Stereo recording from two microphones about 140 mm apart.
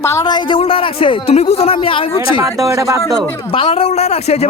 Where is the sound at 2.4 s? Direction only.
20° right (ahead or behind).